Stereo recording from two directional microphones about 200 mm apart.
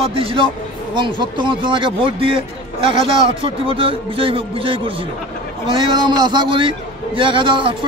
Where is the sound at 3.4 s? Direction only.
25° right (ahead or behind).